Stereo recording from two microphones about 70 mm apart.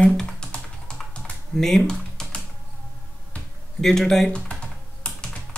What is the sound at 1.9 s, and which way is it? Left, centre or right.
Typing, centre.